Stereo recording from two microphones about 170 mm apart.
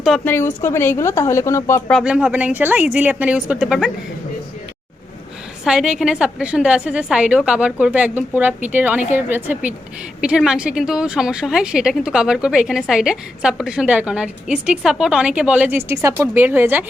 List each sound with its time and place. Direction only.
0.3 s speech: 15° left (ahead or behind)
1.9 s a woman's voice: centre (ahead or behind)
5.6 s a woman's voice: 5° right (ahead or behind)